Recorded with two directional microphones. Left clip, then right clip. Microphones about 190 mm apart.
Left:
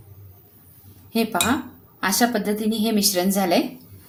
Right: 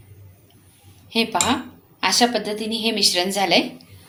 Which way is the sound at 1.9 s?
45° left (ahead or behind).